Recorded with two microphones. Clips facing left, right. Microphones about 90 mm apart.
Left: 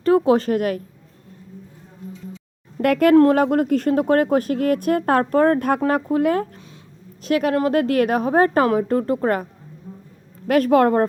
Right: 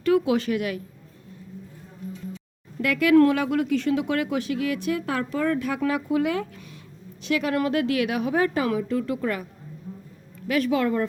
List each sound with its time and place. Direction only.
0.0 s a woman's voice: 35° left (ahead or behind)
2.8 s speech: 50° left (ahead or behind)